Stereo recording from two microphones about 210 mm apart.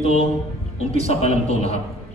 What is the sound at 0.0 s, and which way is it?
A man's voice, 30° left (ahead or behind).